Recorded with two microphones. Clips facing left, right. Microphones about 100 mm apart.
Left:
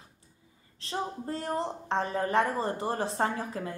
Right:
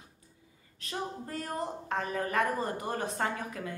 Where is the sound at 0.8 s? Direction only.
30° left (ahead or behind).